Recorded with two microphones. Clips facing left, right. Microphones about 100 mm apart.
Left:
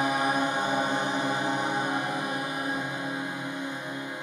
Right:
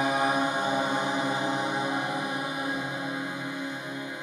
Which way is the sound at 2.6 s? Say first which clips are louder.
Even; 40° left (ahead or behind).